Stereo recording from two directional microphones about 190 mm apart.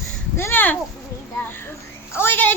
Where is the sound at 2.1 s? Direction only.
10° left (ahead or behind).